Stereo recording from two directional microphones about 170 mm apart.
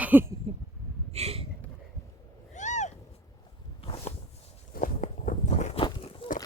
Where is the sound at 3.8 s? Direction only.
30° left (ahead or behind).